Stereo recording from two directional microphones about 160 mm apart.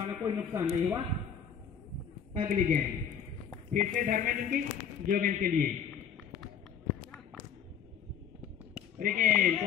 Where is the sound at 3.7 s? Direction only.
60° right (ahead or behind).